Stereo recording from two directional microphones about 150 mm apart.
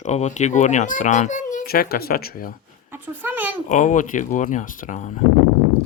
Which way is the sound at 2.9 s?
10° right (ahead or behind).